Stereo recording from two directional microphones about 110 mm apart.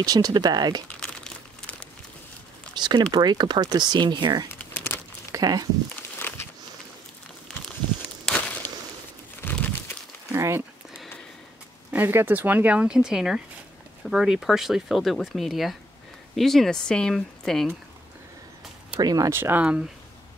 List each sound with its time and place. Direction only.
0.0 s speech: 35° right (ahead or behind)
0.9 s crumpling: 5° left (ahead or behind)
2.7 s speech: 40° right (ahead or behind)
4.5 s a sound: 20° left (ahead or behind)
5.3 s speech: 35° right (ahead or behind)
6.1 s walk: 20° left (ahead or behind)
8.3 s a sound: 5° left (ahead or behind)
9.4 s crumpling: 15° left (ahead or behind)
10.3 s speech: 25° right (ahead or behind)
11.9 s speech: 20° right (ahead or behind); by 17.7 s 5° left (ahead or behind)
18.9 s speech: 35° right (ahead or behind)
19.3 s speech: 20° right (ahead or behind)